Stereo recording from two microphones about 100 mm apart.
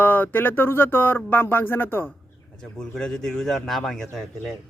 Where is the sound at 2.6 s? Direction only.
5° left (ahead or behind).